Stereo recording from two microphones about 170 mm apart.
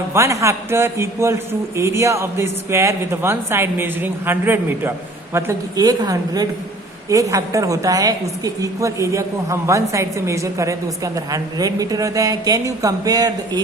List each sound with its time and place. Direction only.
0.1 s a man's voice: 15° right (ahead or behind)